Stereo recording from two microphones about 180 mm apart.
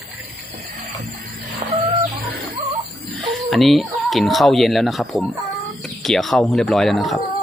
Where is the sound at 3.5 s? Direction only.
Centre (ahead or behind).